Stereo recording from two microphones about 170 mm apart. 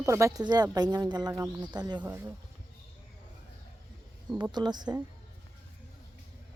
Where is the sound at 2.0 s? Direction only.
10° right (ahead or behind).